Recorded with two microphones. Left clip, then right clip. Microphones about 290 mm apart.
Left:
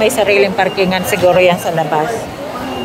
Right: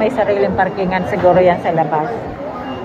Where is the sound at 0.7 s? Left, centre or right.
Left.